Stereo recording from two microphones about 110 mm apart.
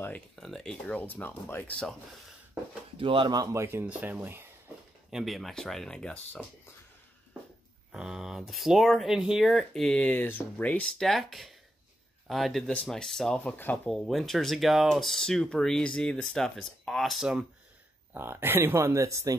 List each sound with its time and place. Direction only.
0.4 s speech: 5° left (ahead or behind)
0.9 s speech: 15° left (ahead or behind)
3.0 s speech: 50° right (ahead or behind)
3.3 s speech: 25° right (ahead or behind)
5.1 s speech: centre (ahead or behind)
7.9 s speech: 5° right (ahead or behind); by 10.9 s 15° left (ahead or behind)
10.9 s speech: 5° left (ahead or behind)
13.4 s speech: 15° left (ahead or behind)
13.9 s speech: 5° left (ahead or behind)
18.1 s speech: 20° right (ahead or behind)